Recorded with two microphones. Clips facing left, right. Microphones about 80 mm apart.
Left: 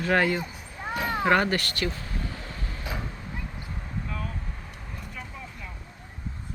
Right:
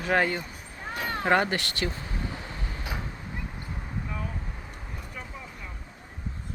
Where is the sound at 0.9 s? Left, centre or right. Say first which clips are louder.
Left 4 dB; centre.